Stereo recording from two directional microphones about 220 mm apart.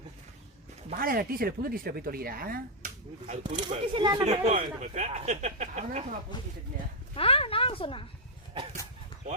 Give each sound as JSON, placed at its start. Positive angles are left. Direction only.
{"t": 0.9, "sound": "speech", "side_deg": -40}
{"t": 3.4, "sound": "speech", "side_deg": -20}
{"t": 7.2, "sound": "speech", "side_deg": 25}